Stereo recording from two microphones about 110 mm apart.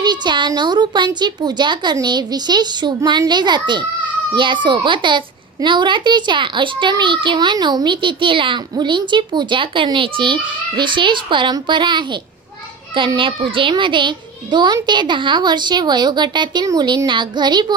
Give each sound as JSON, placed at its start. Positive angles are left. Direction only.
{"t": 0.0, "sound": "a woman's voice", "side_deg": -40}